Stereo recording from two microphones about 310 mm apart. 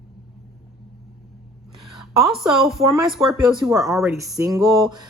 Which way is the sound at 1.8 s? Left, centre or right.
Centre.